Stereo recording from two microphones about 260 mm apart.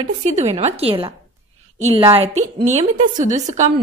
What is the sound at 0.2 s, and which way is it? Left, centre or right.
A woman's voice, right.